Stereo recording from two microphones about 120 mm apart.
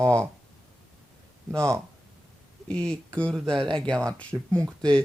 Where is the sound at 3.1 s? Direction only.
5° left (ahead or behind).